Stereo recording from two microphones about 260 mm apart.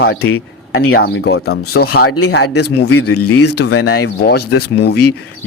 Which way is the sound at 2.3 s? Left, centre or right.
Left.